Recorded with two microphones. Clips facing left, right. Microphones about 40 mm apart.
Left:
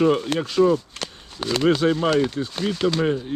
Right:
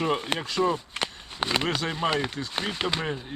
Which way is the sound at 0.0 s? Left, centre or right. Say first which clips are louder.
Left 7 dB; right.